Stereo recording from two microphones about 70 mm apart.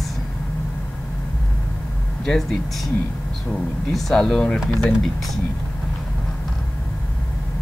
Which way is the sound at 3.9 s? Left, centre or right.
Centre.